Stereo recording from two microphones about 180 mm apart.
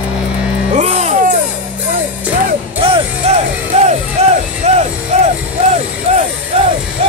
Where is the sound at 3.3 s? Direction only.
35° right (ahead or behind).